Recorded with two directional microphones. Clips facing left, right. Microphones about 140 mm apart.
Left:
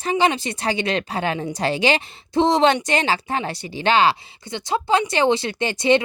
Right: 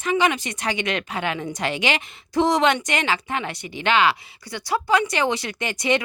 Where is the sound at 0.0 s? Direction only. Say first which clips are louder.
Left 1 dB; 30° left (ahead or behind).